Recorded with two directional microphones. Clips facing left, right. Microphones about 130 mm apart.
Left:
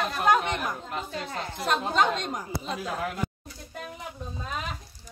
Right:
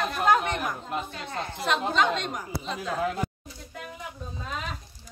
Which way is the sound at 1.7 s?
40° left (ahead or behind).